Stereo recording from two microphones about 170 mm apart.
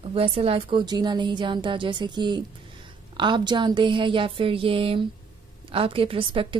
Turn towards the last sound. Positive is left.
turn(degrees=-30)  # may be behind; listen again after turning